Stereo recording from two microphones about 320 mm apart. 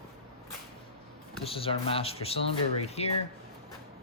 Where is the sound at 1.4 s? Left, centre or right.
Centre.